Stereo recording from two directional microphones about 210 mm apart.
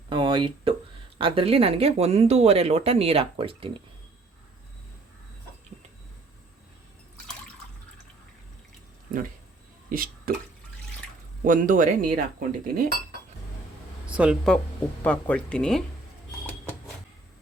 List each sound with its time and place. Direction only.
0.1 s a sound: 25° right (ahead or behind)
1.2 s speech: 25° right (ahead or behind)
9.9 s speech: 45° right (ahead or behind)
11.4 s speech: 40° right (ahead or behind)
14.1 s speech: 5° right (ahead or behind)
15.0 s speech: 5° left (ahead or behind)